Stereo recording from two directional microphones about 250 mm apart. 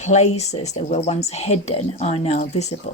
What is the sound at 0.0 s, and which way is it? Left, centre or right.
A woman's voice, left.